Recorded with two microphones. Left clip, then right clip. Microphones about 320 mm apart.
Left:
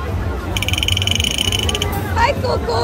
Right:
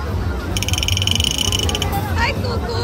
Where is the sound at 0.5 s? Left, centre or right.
Centre.